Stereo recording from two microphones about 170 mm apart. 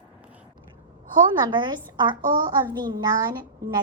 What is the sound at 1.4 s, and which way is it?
A child's voice, 25° right (ahead or behind).